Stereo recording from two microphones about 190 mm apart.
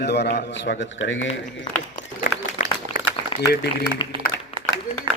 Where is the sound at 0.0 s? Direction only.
60° left (ahead or behind); by 1.3 s 80° left.